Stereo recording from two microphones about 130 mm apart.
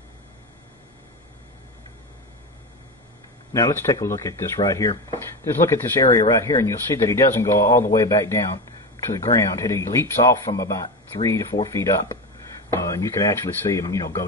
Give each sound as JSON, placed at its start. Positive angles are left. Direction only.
{"t": 3.5, "sound": "speech", "side_deg": 25}